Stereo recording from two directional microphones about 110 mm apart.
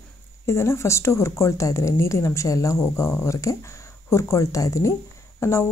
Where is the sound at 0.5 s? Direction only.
25° left (ahead or behind).